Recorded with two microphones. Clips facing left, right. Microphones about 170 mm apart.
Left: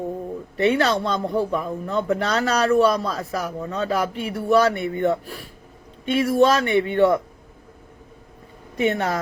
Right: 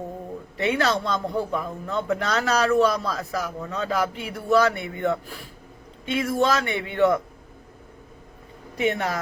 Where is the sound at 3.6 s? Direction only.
35° left (ahead or behind).